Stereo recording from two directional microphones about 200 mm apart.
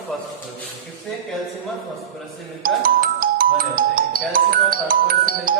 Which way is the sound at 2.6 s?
45° right (ahead or behind).